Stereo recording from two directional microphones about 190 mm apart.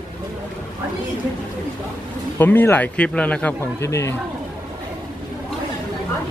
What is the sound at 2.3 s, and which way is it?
Speech, 10° left (ahead or behind).